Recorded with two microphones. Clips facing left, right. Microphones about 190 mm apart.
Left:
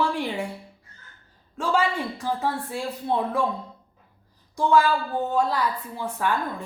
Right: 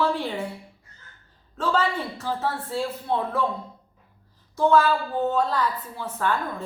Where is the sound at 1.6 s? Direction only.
10° left (ahead or behind).